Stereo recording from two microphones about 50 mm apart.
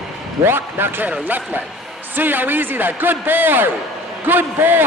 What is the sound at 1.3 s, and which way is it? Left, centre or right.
A man's voice, right.